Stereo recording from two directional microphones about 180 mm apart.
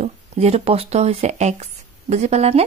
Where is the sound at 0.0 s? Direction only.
35° right (ahead or behind).